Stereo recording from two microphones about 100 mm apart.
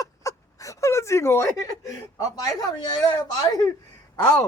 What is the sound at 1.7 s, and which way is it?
Speech, 35° left (ahead or behind).